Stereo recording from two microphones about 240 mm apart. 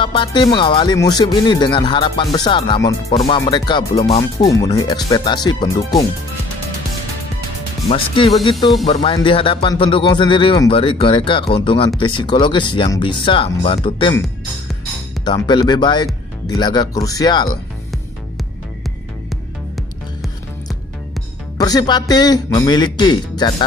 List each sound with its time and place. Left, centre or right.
0.0 s a man's voice: left
7.9 s speech: left
15.2 s a man's voice: centre
21.5 s a man's voice: centre